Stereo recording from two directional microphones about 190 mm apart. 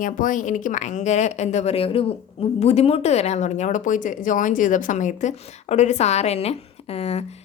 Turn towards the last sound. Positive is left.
turn(degrees=35)  # may be behind; listen again after turning